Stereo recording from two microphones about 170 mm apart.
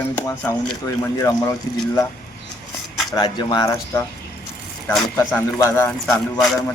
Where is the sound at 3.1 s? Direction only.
25° left (ahead or behind).